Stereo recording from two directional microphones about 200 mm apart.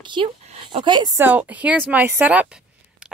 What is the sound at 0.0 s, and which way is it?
Speech, 25° right (ahead or behind).